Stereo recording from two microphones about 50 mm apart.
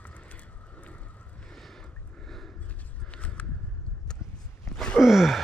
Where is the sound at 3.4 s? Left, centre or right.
Left.